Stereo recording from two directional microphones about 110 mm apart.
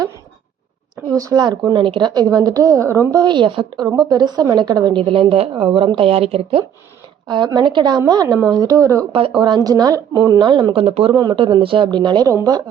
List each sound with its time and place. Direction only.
1.2 s a woman's voice: 35° right (ahead or behind)
1.7 s a woman's voice: 50° right (ahead or behind)
5.0 s speech: 60° right (ahead or behind)
7.3 s a woman's voice: 40° right (ahead or behind)
9.3 s a woman's voice: 40° right (ahead or behind); by 11.2 s 60° right (ahead or behind)
11.2 s a woman's voice: 45° right (ahead or behind)
12.3 s speech: 25° right (ahead or behind)